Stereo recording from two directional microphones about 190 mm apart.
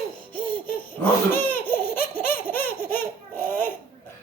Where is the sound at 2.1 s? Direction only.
10° left (ahead or behind).